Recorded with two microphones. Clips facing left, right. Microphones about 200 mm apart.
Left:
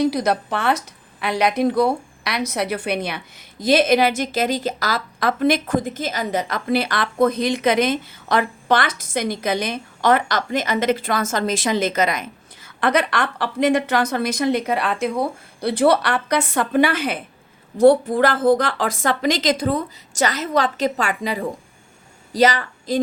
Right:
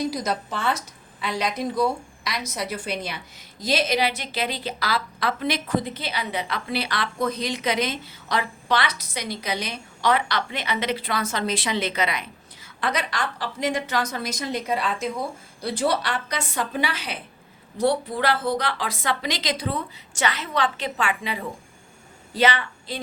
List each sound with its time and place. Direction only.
0.0 s a woman's voice: 65° left (ahead or behind); by 23.0 s 40° left (ahead or behind)